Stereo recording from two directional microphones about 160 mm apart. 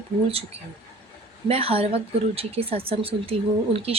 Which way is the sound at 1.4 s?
35° right (ahead or behind).